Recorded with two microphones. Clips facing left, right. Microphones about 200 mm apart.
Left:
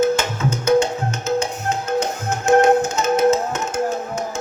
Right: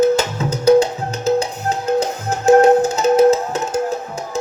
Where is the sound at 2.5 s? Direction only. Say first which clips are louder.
Right 4 dB; 35° right (ahead or behind).